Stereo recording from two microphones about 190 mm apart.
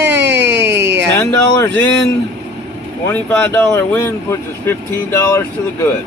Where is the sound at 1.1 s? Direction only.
10° left (ahead or behind).